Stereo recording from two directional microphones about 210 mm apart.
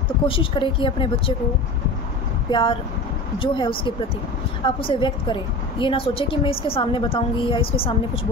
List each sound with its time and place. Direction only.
0.3 s a woman's voice: 25° left (ahead or behind)
2.5 s a woman's voice: 25° left (ahead or behind)